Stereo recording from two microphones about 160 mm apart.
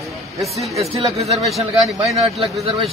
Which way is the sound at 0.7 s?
40° right (ahead or behind).